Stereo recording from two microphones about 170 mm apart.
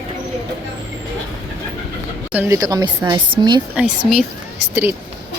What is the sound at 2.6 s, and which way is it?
Speech, 20° right (ahead or behind).